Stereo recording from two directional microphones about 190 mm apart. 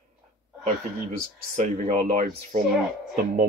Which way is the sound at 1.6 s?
40° right (ahead or behind).